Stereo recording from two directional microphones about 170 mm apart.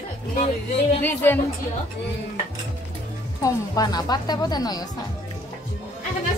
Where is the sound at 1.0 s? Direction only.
10° left (ahead or behind).